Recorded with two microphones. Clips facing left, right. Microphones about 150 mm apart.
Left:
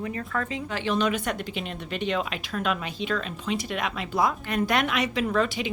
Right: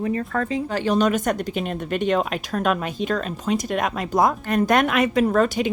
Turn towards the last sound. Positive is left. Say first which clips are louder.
# right 6 dB
turn(degrees=-45)  # may be behind; listen again after turning